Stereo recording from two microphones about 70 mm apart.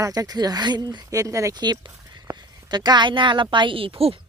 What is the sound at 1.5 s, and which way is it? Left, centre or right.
Speech, right.